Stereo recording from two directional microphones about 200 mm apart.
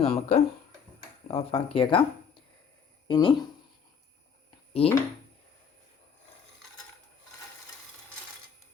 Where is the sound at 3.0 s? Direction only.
25° left (ahead or behind).